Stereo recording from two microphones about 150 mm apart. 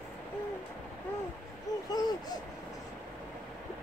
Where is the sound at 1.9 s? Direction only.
25° left (ahead or behind).